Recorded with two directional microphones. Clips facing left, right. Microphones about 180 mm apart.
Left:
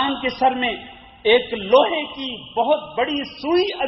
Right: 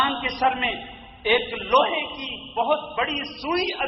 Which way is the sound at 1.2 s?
25° left (ahead or behind).